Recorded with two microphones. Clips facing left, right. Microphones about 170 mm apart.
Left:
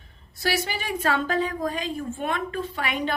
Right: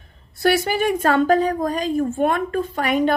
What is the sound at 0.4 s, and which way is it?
A woman's voice, 50° right (ahead or behind).